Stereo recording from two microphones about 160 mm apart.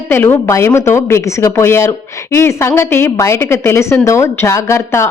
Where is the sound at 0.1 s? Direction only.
15° left (ahead or behind).